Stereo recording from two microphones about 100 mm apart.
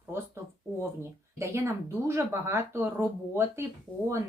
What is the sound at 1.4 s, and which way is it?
Speech, 25° right (ahead or behind).